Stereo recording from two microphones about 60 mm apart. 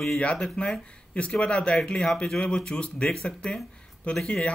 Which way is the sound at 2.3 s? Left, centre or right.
Centre.